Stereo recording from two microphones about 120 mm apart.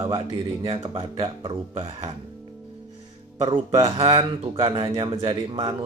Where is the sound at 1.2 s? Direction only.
50° right (ahead or behind).